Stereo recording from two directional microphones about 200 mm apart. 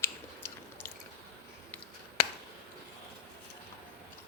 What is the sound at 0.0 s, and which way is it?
Chewing, 10° left (ahead or behind).